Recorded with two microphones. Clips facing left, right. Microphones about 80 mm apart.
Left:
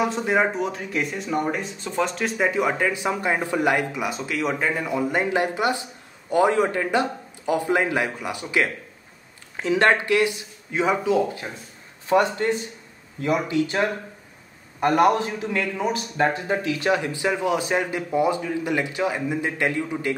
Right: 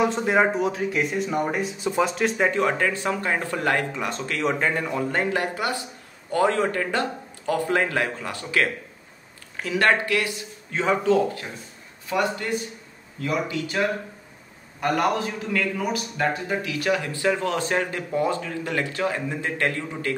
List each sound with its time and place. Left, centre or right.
0.0 s a man's voice: centre
12.1 s a man's voice: left